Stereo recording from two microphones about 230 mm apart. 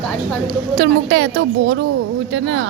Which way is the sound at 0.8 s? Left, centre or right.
Right.